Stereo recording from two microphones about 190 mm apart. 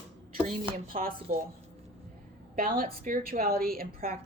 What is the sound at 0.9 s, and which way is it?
Speech, 50° right (ahead or behind).